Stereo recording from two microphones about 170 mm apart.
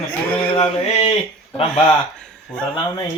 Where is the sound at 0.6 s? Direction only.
35° left (ahead or behind).